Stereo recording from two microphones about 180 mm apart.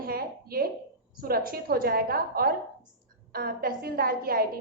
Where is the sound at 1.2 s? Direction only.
55° right (ahead or behind).